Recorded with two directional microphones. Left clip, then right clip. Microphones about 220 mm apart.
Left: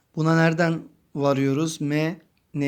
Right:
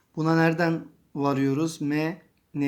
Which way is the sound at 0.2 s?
35° left (ahead or behind).